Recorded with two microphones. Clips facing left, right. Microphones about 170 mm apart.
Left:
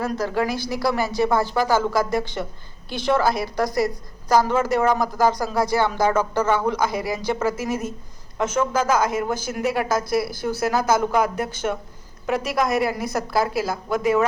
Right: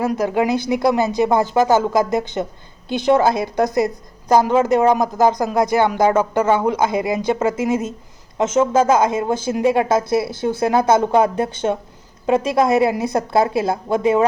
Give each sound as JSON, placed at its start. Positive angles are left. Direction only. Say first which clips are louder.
{"t": 0.0, "sound": "a woman's voice", "louder": "right 5 dB", "side_deg": -15}